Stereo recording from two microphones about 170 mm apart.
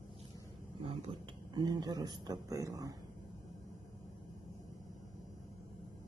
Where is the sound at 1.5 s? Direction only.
25° right (ahead or behind).